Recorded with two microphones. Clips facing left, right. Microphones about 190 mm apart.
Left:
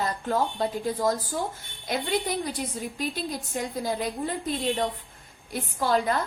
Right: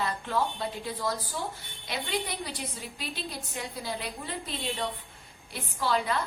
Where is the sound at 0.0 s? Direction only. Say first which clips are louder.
Left 3 dB; 45° left (ahead or behind).